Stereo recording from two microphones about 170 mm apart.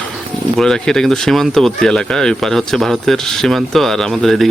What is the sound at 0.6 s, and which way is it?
Speech, 5° left (ahead or behind).